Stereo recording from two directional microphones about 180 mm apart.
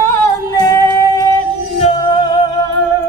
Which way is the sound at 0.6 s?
15° left (ahead or behind).